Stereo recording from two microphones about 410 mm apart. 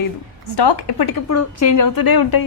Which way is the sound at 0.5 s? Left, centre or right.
Left.